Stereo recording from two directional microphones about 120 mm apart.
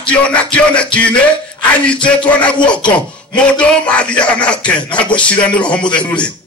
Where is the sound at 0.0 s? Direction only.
10° left (ahead or behind).